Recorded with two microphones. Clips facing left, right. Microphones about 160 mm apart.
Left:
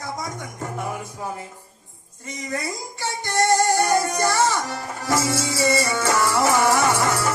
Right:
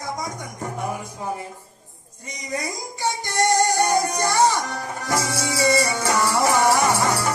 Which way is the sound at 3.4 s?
15° right (ahead or behind).